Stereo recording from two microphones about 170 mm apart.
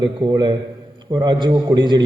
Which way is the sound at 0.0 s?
25° right (ahead or behind).